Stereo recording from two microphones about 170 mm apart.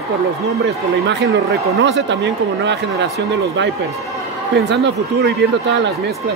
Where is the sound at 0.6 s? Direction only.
90° right.